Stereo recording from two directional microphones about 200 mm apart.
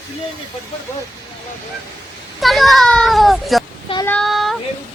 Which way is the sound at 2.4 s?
Centre (ahead or behind).